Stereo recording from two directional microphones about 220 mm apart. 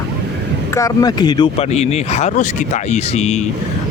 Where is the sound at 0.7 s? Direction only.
15° left (ahead or behind); by 3.4 s 30° left (ahead or behind).